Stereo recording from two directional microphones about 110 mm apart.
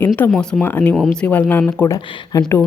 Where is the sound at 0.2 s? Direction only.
15° left (ahead or behind).